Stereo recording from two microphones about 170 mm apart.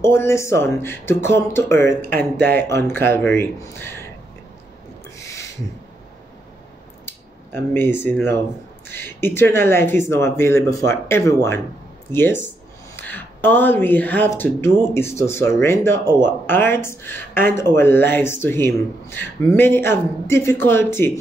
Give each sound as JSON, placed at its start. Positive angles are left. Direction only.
{"t": 0.0, "sound": "speech", "side_deg": 15}
{"t": 5.1, "sound": "a sound", "side_deg": 20}
{"t": 7.5, "sound": "speech", "side_deg": 15}